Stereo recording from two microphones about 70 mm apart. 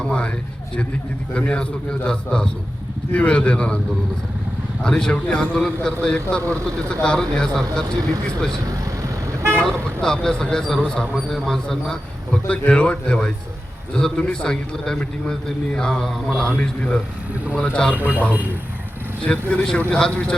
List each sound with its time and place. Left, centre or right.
0.0 s a man's voice: centre
1.3 s a man's voice: centre
4.8 s a man's voice: centre
9.6 s a man's voice: centre
11.1 s a man's voice: centre
18.0 s a man's voice: right
19.2 s a man's voice: centre